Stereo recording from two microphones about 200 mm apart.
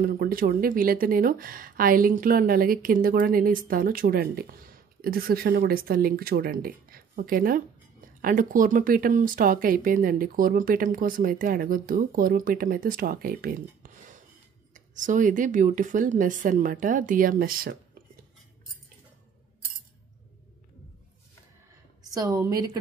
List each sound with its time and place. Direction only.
0.0 s speech: 45° right (ahead or behind)
22.1 s a woman's voice: 20° right (ahead or behind)